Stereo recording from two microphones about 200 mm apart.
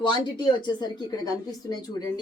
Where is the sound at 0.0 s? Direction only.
20° left (ahead or behind).